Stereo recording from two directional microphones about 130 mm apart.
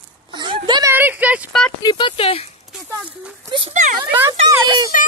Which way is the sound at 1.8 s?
35° left (ahead or behind).